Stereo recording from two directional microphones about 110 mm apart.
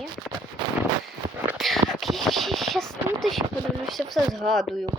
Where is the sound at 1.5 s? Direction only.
Centre (ahead or behind).